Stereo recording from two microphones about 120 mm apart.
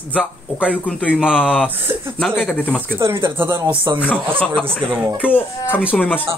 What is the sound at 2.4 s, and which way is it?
Speech, 15° left (ahead or behind).